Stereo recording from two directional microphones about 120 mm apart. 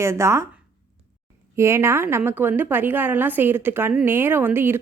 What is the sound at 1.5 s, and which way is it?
A woman's voice, 25° right (ahead or behind).